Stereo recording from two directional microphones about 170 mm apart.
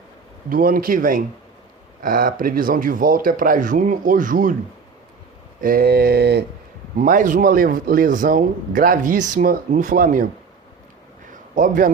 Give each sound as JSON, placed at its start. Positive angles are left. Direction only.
{"t": 0.5, "sound": "mantra", "side_deg": -55}
{"t": 2.0, "sound": "speech", "side_deg": -55}
{"t": 5.5, "sound": "mantra", "side_deg": -60}
{"t": 6.9, "sound": "speech", "side_deg": -50}
{"t": 11.3, "sound": "a sound", "side_deg": -50}